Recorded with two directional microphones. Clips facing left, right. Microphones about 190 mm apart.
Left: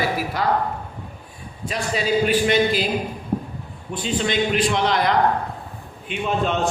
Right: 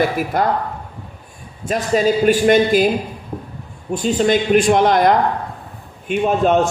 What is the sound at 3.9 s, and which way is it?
A man's voice, 45° right (ahead or behind).